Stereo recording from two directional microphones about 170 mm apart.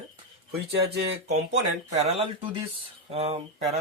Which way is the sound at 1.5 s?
40° right (ahead or behind).